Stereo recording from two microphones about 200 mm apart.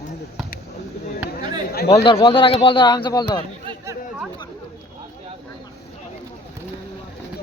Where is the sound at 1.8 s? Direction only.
30° left (ahead or behind).